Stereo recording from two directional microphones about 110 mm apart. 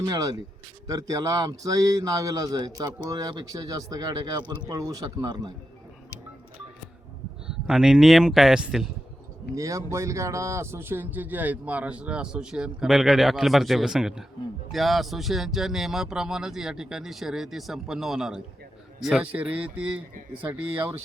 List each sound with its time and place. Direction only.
0.0 s a man's voice: 35° right (ahead or behind)
7.4 s speech: 5° right (ahead or behind)
9.6 s speech: 30° right (ahead or behind); by 19.5 s 15° right (ahead or behind)